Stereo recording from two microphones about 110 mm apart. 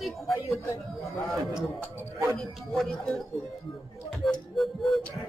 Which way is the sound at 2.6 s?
Centre (ahead or behind).